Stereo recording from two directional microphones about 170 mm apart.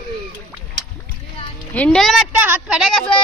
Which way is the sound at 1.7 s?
5° left (ahead or behind).